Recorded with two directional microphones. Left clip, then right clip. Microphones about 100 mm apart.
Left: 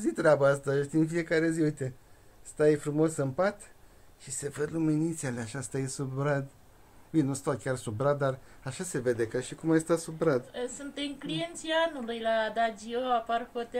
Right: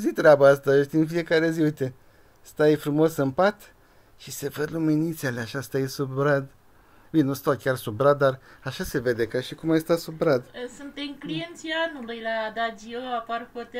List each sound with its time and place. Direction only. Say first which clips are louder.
0.0 s speech: right 8 dB; 55° right (ahead or behind)
4.7 s speech: right 5 dB; 45° right (ahead or behind)
12.1 s speech: even; 35° left (ahead or behind)